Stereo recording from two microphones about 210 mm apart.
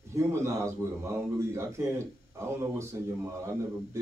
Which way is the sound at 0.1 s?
15° right (ahead or behind).